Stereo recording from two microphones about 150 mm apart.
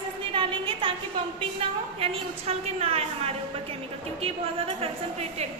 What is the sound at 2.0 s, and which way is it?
A woman's voice, 40° right (ahead or behind).